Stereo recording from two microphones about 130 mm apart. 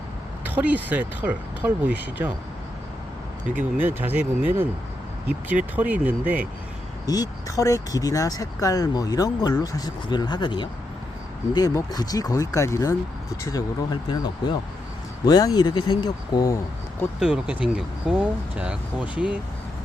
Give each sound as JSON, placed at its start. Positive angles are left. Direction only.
{"t": 0.4, "sound": "speech", "side_deg": -15}
{"t": 3.5, "sound": "speech", "side_deg": -15}
{"t": 5.7, "sound": "speech", "side_deg": -10}
{"t": 7.0, "sound": "speech", "side_deg": 30}
{"t": 15.3, "sound": "speech", "side_deg": 30}
{"t": 17.2, "sound": "speech", "side_deg": -5}